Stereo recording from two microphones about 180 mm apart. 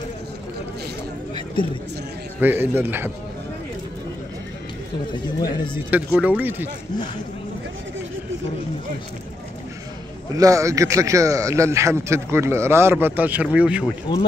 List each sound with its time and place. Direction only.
2.4 s a man's voice: 10° right (ahead or behind)
5.9 s a man's voice: 10° right (ahead or behind)
10.3 s a man's voice: 20° right (ahead or behind)
14.1 s speech: 25° left (ahead or behind)